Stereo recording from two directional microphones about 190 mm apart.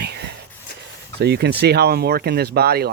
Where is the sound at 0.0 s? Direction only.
60° right (ahead or behind).